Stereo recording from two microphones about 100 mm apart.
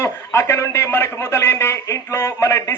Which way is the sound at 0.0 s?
25° left (ahead or behind).